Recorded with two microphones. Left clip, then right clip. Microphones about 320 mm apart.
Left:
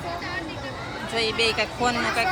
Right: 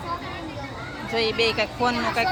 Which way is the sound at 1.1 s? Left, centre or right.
Centre.